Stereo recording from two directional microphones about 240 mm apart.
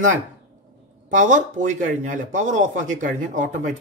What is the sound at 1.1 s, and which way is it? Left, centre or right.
A man's voice, right.